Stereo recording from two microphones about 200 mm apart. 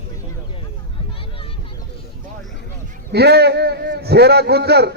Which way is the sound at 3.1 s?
55° right (ahead or behind).